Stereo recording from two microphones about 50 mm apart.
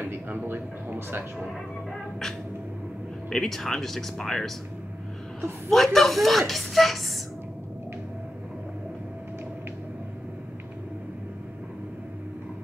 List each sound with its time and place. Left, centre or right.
0.0 s a sound: right
0.5 s a man's voice: right
3.3 s speech: centre
5.7 s a woman's voice: centre